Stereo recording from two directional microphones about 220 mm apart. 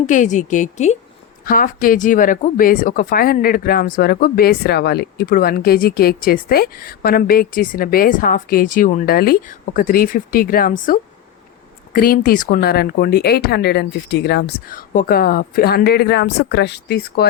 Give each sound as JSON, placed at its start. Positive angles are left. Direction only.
{"t": 0.1, "sound": "speech", "side_deg": 35}
{"t": 11.9, "sound": "speech", "side_deg": 40}